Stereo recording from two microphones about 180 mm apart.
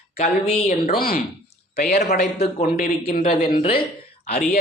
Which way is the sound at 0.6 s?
55° left (ahead or behind).